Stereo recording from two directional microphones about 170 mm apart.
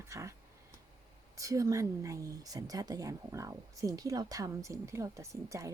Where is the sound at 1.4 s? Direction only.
20° right (ahead or behind).